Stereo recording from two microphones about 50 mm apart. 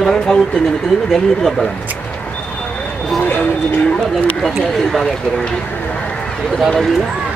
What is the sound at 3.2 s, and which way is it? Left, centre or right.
Speech, left.